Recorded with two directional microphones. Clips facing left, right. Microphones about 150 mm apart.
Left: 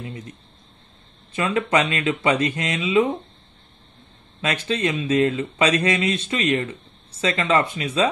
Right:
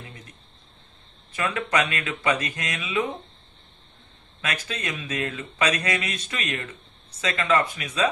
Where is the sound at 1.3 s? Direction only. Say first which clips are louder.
Left 5 dB; 25° left (ahead or behind).